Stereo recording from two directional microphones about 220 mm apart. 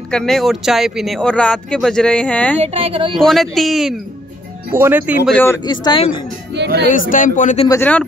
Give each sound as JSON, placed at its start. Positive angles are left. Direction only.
{"t": 0.1, "sound": "speech", "side_deg": 0}
{"t": 2.6, "sound": "speech", "side_deg": -25}
{"t": 3.2, "sound": "speech", "side_deg": 0}
{"t": 5.3, "sound": "speech", "side_deg": 10}
{"t": 6.5, "sound": "speech", "side_deg": -50}
{"t": 6.9, "sound": "speech", "side_deg": 35}
{"t": 7.6, "sound": "speech", "side_deg": 10}